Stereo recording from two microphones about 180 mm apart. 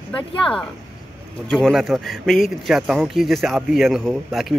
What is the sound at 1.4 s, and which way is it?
Speech, centre (ahead or behind).